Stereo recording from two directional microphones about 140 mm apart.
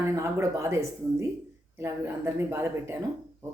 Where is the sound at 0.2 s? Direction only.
20° right (ahead or behind).